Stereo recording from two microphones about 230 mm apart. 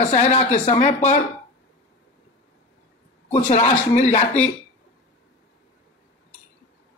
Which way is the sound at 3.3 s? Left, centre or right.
Left.